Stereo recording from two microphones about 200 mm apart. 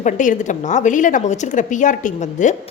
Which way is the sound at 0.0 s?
40° left (ahead or behind).